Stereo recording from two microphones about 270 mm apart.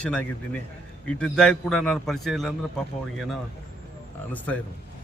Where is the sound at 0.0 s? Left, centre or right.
Centre.